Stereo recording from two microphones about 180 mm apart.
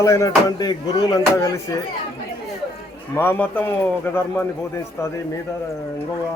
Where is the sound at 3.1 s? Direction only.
10° left (ahead or behind).